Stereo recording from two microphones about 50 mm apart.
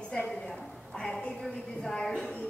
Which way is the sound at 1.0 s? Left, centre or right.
Centre.